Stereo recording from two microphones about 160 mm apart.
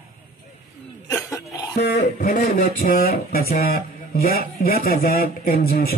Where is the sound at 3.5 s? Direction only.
65° left (ahead or behind).